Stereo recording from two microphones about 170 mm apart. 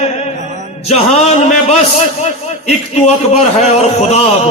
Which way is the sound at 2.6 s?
40° left (ahead or behind).